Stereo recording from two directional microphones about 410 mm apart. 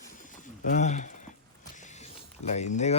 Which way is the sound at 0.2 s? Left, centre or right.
Centre.